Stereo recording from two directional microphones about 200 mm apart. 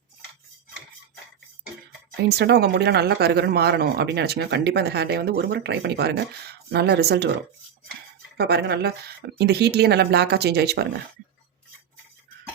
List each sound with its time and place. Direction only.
2.2 s speech: 55° right (ahead or behind)
8.4 s speech: 55° right (ahead or behind)